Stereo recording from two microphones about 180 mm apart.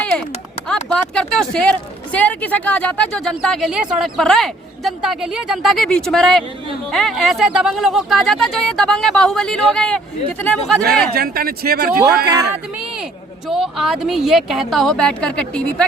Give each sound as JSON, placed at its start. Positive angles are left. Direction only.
{"t": 0.9, "sound": "speech", "side_deg": 5}
{"t": 11.1, "sound": "speech", "side_deg": -55}
{"t": 13.5, "sound": "speech", "side_deg": 0}